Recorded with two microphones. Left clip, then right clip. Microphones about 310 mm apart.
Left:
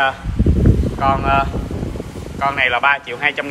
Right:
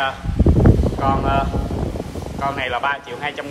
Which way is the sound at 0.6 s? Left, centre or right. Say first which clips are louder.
Left 2 dB; centre.